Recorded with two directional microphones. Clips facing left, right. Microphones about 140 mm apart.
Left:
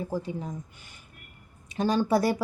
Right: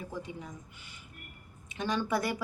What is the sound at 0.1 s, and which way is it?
Speech, 35° left (ahead or behind).